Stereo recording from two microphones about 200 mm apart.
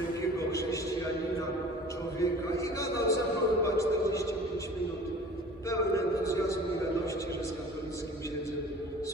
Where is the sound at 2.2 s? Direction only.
15° left (ahead or behind).